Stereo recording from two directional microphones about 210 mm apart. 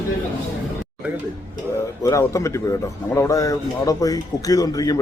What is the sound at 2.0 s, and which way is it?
Speech, 15° left (ahead or behind).